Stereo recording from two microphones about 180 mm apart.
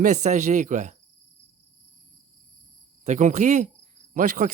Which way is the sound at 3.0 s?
45° right (ahead or behind).